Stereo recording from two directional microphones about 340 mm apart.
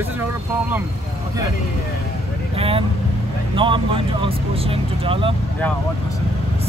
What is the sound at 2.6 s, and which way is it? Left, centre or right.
Speech, centre.